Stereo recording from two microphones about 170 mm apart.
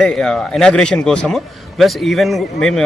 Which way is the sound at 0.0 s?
5° left (ahead or behind).